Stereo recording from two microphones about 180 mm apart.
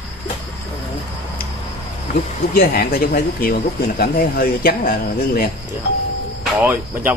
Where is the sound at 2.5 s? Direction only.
55° left (ahead or behind).